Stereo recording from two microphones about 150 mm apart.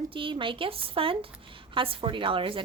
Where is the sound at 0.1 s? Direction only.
35° right (ahead or behind).